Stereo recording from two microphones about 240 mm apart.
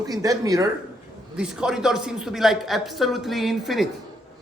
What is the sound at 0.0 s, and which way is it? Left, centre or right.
Speech, centre.